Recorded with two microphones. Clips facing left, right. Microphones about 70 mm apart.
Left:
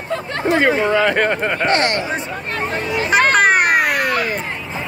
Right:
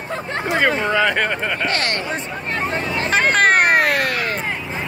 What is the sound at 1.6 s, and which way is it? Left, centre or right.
Speech, left.